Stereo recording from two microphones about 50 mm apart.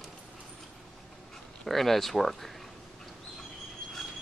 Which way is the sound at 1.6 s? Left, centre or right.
Centre.